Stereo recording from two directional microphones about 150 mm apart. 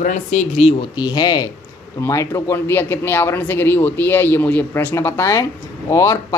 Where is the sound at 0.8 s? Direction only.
30° left (ahead or behind).